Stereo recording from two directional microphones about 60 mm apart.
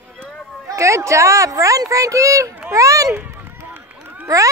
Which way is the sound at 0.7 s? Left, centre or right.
Right.